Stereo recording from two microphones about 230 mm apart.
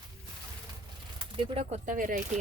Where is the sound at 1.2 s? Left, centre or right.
Right.